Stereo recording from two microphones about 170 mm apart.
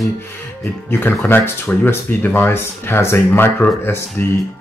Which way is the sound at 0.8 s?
10° left (ahead or behind).